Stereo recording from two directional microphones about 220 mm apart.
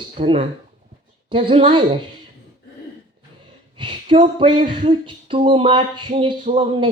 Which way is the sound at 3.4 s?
25° right (ahead or behind).